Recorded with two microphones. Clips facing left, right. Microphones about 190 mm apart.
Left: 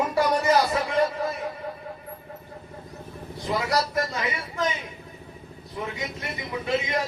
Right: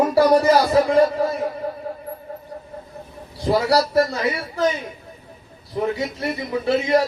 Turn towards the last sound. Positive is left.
turn(degrees=-35)  # may be behind; listen again after turning